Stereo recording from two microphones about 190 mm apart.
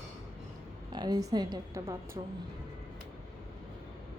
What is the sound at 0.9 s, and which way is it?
A woman's voice, 20° right (ahead or behind).